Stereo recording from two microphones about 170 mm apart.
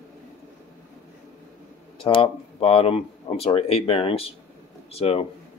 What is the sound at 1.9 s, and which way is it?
Speech, 30° left (ahead or behind).